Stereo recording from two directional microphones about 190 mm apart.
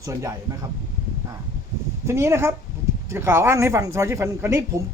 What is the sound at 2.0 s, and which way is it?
Speech, 15° right (ahead or behind).